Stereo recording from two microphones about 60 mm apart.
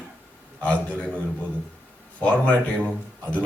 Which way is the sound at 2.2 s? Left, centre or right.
Left.